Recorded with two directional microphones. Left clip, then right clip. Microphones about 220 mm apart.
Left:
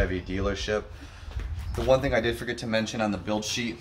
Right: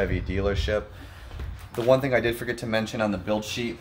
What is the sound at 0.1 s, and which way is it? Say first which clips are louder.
Speech: right 2 dB; 30° right (ahead or behind).